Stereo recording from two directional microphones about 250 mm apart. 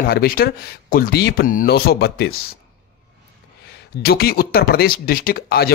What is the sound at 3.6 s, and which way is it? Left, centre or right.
Speech, left.